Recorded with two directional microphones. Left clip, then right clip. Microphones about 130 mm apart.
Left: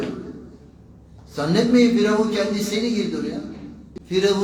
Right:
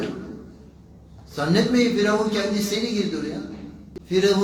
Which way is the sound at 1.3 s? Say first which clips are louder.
Left 2 dB; 15° left (ahead or behind).